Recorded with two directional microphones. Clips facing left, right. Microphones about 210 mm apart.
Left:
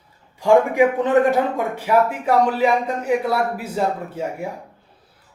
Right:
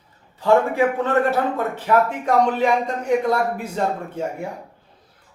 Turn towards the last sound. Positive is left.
turn(degrees=5)  # may be behind; listen again after turning